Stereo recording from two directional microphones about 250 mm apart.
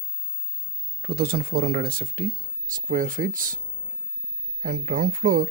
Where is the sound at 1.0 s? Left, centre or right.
Right.